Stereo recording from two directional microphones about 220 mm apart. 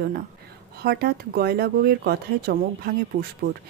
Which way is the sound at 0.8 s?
45° right (ahead or behind).